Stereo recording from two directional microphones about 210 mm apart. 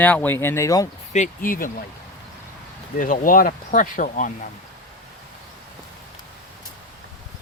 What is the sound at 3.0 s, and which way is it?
Speech, 40° left (ahead or behind).